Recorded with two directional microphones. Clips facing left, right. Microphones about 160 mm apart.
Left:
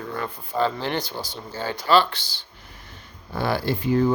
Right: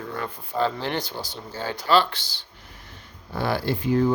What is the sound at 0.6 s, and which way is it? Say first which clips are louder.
Speech: left 1 dB; 45° left (ahead or behind).